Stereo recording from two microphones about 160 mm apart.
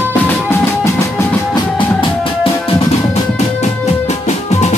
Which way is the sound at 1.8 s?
35° left (ahead or behind).